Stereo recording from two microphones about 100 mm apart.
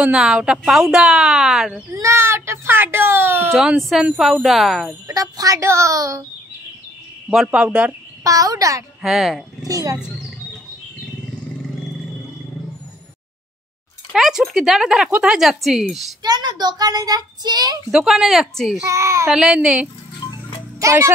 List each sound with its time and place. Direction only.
0.0 s speech: 5° right (ahead or behind)
1.9 s speech: 25° right (ahead or behind)
3.9 s speech: 5° right (ahead or behind)
5.0 s speech: 35° right (ahead or behind)
7.2 s speech: 10° right (ahead or behind)
8.2 s speech: 35° right (ahead or behind)
9.0 s speech: 5° right (ahead or behind)
9.7 s speech: 35° right (ahead or behind)
14.1 s speech: 5° right (ahead or behind)
16.2 s speech: 45° right (ahead or behind)
17.9 s speech: 5° right (ahead or behind)
18.9 s speech: 30° right (ahead or behind)
19.2 s speech: 5° right (ahead or behind)
20.8 s speech: 30° right (ahead or behind)